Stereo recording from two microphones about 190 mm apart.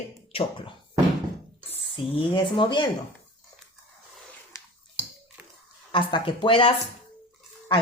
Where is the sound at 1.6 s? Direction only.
30° left (ahead or behind).